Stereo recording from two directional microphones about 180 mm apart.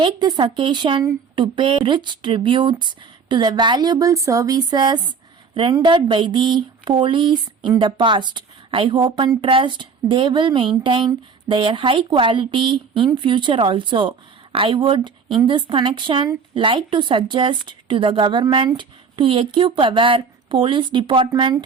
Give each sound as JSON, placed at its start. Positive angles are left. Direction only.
{"t": 0.0, "sound": "speech", "side_deg": -25}